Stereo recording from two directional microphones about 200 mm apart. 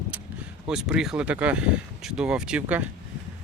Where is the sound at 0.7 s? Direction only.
5° right (ahead or behind).